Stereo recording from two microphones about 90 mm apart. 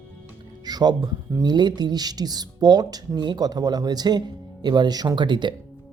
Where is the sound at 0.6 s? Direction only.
50° right (ahead or behind).